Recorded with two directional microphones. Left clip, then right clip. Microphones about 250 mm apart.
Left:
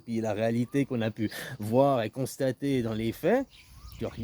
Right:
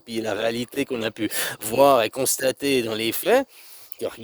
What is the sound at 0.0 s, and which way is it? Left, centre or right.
Speech, right.